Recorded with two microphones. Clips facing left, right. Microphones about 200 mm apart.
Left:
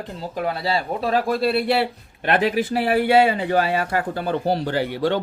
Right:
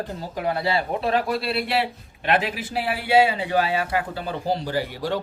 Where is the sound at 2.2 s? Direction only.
50° left (ahead or behind).